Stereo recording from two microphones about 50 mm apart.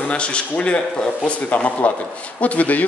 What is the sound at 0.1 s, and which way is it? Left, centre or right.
A man's voice, left.